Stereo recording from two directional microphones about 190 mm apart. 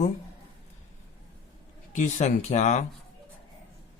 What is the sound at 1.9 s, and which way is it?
Speech, 35° left (ahead or behind).